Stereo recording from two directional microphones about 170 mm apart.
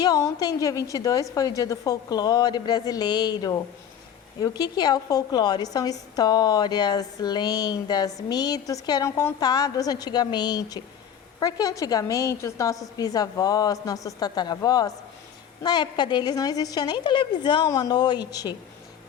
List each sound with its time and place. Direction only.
0.0 s a woman's voice: 20° left (ahead or behind)